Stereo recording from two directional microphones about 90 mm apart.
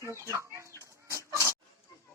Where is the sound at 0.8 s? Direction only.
35° right (ahead or behind).